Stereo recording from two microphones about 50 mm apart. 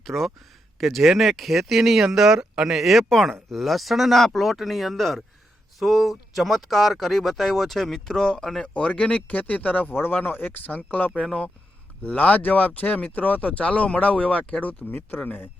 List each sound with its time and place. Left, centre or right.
0.0 s speech: centre
8.6 s speech: left